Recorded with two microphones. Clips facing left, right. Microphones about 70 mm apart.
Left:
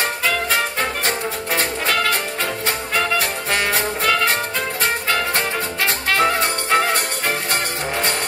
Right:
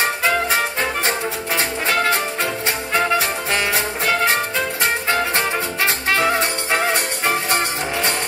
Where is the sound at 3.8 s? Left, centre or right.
Right.